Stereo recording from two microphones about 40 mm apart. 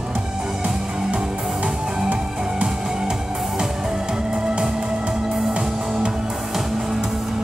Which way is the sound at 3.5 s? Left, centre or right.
Centre.